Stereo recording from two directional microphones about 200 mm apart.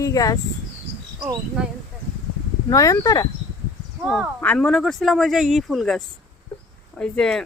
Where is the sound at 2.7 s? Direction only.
15° left (ahead or behind).